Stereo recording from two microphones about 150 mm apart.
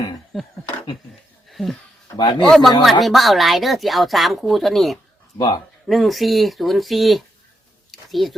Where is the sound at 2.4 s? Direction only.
Centre (ahead or behind).